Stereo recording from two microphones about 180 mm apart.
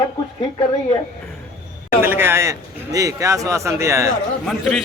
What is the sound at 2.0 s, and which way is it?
A man's voice, 10° right (ahead or behind).